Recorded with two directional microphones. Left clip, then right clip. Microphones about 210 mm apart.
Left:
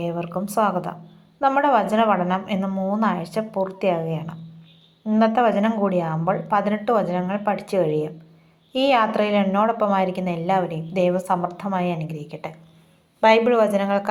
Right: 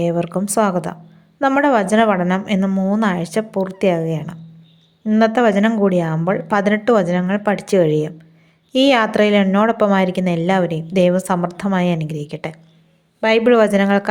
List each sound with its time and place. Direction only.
0.0 s a woman's voice: 50° right (ahead or behind)